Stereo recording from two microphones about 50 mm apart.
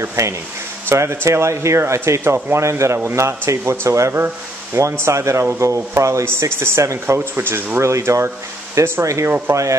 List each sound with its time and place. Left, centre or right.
0.0 s speech: right
0.9 s speech: right
1.8 s speech: right
5.6 s speech: right
7.3 s speech: right
7.8 s speech: right